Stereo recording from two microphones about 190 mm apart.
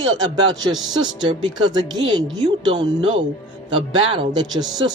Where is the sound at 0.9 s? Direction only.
25° right (ahead or behind).